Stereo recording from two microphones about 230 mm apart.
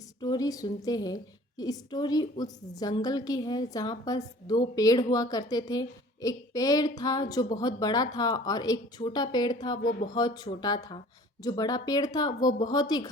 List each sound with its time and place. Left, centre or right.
0.2 s a woman's voice: centre